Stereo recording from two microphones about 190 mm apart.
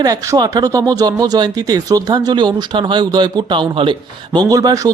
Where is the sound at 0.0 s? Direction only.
20° right (ahead or behind).